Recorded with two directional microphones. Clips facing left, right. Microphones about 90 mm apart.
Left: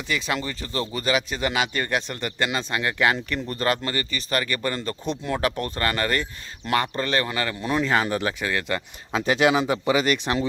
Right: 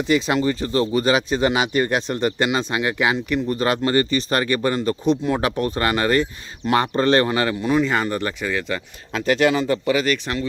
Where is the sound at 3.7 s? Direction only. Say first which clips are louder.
Right 8 dB; 25° right (ahead or behind).